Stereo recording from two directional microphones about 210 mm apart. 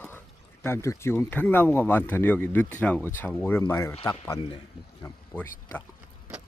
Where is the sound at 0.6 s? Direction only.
10° left (ahead or behind).